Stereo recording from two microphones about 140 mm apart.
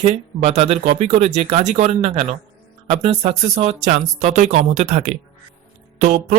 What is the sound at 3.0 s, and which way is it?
Speech, 45° right (ahead or behind).